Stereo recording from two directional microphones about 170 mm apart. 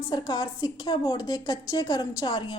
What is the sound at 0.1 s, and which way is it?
A woman's voice, 25° left (ahead or behind).